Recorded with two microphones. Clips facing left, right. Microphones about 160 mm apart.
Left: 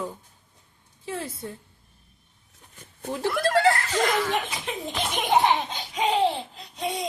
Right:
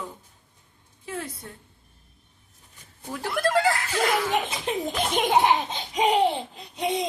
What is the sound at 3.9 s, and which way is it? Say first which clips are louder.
Speech: even; 10° right (ahead or behind).